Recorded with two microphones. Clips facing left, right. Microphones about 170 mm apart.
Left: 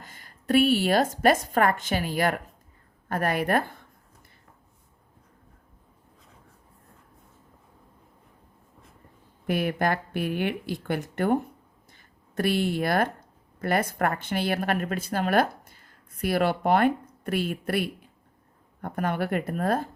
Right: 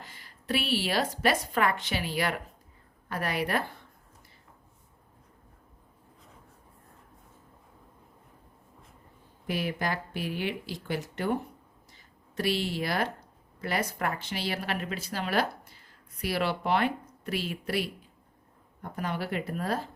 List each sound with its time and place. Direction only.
0.0 s a woman's voice: 45° left (ahead or behind)
9.5 s speech: 55° left (ahead or behind)